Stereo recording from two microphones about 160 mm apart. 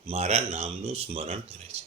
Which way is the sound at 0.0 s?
40° right (ahead or behind).